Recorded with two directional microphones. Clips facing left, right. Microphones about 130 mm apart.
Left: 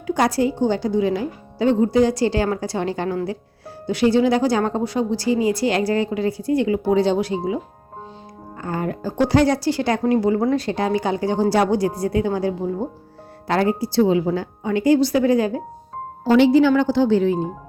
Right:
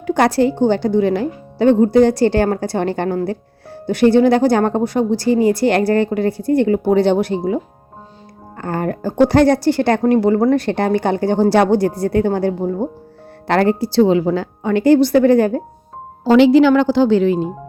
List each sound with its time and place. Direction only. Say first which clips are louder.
0.1 s speech: right 5 dB; 70° right (ahead or behind)
8.6 s speech: right 4 dB; 60° right (ahead or behind)
13.5 s a woman's voice: right 4 dB; 70° right (ahead or behind)
16.2 s speech: right 4 dB; 90° right